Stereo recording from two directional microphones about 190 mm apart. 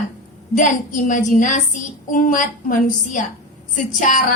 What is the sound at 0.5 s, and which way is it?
Speech, 40° left (ahead or behind).